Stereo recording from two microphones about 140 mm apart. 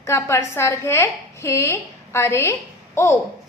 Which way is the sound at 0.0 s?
20° left (ahead or behind).